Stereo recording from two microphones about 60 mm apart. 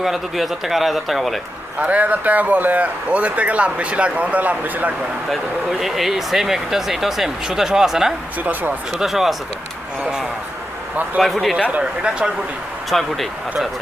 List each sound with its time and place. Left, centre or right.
0.0 s speech: centre
1.8 s speech: right
5.8 s speech: centre
11.2 s speech: centre
11.6 s speech: centre
12.9 s speech: centre